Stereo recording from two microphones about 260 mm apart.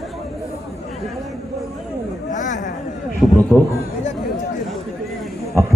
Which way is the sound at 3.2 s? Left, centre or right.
Centre.